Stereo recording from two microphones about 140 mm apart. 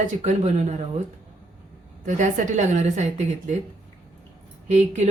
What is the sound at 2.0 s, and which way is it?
A woman's voice, 60° right (ahead or behind).